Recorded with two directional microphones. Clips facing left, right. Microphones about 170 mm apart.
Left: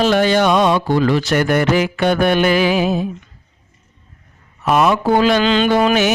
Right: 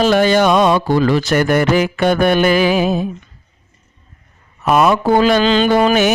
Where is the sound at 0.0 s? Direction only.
45° right (ahead or behind).